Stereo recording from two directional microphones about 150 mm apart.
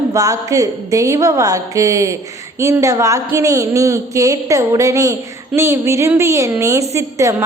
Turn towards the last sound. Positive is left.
turn(degrees=-20)  # may be behind; listen again after turning